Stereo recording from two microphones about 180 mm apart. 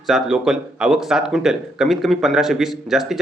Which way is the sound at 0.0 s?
Centre (ahead or behind).